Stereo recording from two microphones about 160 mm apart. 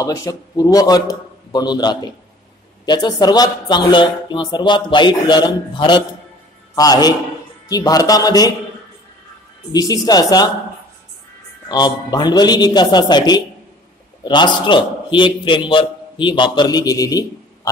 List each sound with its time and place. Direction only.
0.0 s a man's voice: 20° left (ahead or behind)
9.7 s speech: 25° left (ahead or behind)
11.7 s speech: 25° left (ahead or behind)